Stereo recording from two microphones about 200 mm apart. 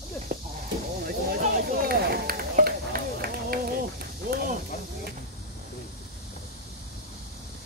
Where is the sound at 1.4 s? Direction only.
45° right (ahead or behind).